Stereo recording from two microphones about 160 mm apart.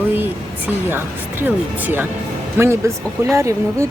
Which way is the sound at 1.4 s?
10° right (ahead or behind).